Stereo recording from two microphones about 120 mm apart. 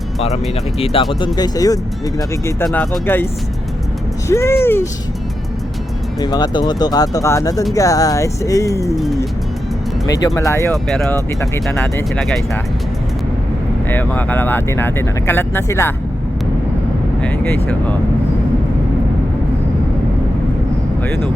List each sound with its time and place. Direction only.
1.2 s speech: 30° left (ahead or behind)
3.1 s speech: 15° left (ahead or behind)
4.3 s speech: 25° left (ahead or behind)
6.1 s speech: 35° left (ahead or behind)
10.1 s speech: 25° left (ahead or behind)
10.7 s speech: 5° left (ahead or behind)
13.9 s speech: 15° left (ahead or behind)
17.2 s speech: 20° left (ahead or behind)